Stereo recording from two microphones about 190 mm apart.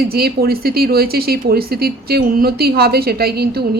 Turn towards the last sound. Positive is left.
turn(degrees=-55)  # may be behind; listen again after turning